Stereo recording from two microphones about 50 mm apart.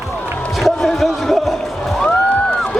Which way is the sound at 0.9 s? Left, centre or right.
Centre.